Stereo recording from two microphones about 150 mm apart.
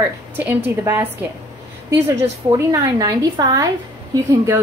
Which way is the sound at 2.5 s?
20° right (ahead or behind).